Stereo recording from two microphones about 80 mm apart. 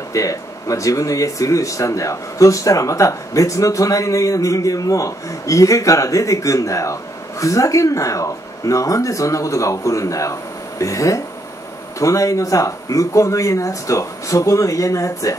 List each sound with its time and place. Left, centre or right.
0.1 s speech: left